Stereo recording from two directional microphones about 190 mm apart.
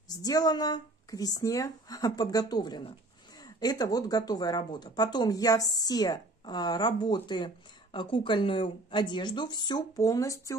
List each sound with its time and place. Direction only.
0.1 s speech: 20° left (ahead or behind)